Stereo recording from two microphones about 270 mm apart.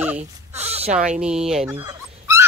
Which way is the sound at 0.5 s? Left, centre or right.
Right.